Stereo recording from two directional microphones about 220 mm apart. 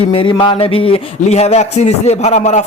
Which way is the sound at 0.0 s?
25° left (ahead or behind).